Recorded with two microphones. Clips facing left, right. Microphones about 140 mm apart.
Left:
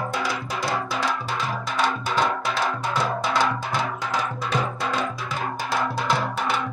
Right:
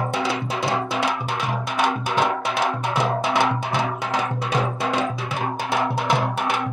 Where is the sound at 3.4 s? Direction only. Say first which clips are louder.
Right 3 dB; 15° right (ahead or behind).